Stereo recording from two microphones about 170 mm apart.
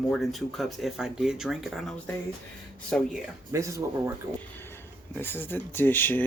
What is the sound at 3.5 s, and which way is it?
Speech, 20° right (ahead or behind).